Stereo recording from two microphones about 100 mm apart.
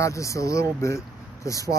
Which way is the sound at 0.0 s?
30° left (ahead or behind).